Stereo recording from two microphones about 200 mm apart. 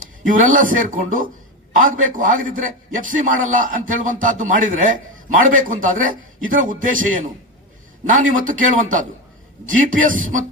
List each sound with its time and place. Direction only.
0.3 s a man's voice: 40° right (ahead or behind)